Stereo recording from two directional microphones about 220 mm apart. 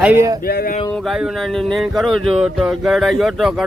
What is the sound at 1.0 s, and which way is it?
Speech, centre (ahead or behind).